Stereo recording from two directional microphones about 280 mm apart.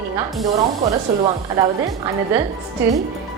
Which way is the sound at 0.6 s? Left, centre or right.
Right.